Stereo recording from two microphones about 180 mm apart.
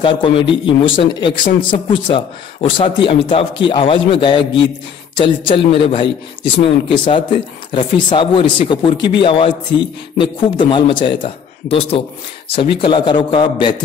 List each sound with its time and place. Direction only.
0.0 s speech: 30° left (ahead or behind)